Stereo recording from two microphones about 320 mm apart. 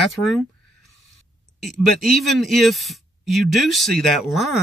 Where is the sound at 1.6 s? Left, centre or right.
Centre.